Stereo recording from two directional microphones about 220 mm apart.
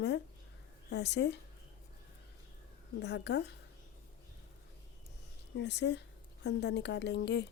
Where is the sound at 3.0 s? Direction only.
50° left (ahead or behind).